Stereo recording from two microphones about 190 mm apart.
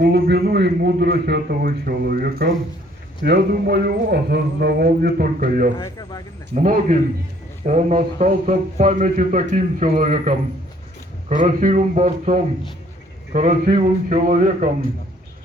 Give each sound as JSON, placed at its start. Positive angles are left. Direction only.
{"t": 0.0, "sound": "a sound", "side_deg": -60}
{"t": 3.2, "sound": "speech", "side_deg": -55}
{"t": 5.8, "sound": "speech", "side_deg": 20}
{"t": 6.5, "sound": "a man's voice", "side_deg": -40}